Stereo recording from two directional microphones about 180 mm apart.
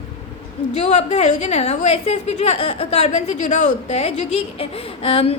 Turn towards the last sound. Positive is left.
turn(degrees=30)  # may be behind; listen again after turning